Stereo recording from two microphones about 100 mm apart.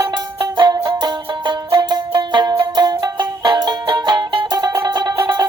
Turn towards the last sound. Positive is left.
turn(degrees=-45)  # may be behind; listen again after turning